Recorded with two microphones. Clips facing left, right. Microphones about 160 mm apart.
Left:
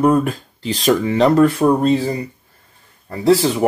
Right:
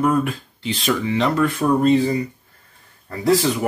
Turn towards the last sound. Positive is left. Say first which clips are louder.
# left 4 dB
turn(degrees=25)  # may be behind; listen again after turning